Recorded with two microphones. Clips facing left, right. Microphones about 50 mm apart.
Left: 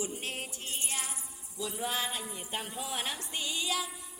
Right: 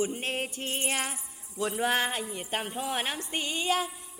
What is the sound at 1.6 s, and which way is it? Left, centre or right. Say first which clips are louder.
Speech: right 7 dB; right.